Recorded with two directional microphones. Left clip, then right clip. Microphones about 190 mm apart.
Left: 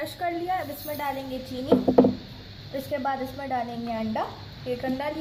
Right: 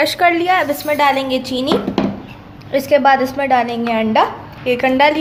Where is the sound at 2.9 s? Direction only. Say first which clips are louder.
Right 17 dB; 40° right (ahead or behind).